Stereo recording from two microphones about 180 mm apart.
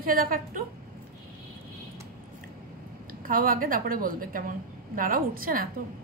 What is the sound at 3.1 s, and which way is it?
A woman's voice, 50° right (ahead or behind).